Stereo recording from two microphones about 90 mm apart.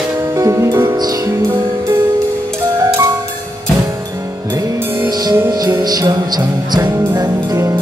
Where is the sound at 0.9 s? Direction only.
45° right (ahead or behind).